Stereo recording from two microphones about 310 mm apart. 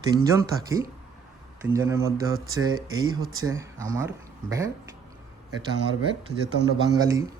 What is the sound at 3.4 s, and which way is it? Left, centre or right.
Speech, centre.